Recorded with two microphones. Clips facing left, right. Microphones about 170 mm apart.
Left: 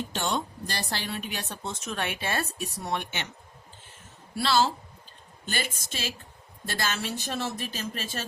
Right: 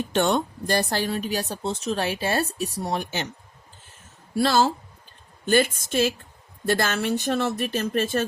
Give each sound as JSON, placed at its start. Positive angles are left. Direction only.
{"t": 0.1, "sound": "speech", "side_deg": -60}
{"t": 4.4, "sound": "a woman's voice", "side_deg": -45}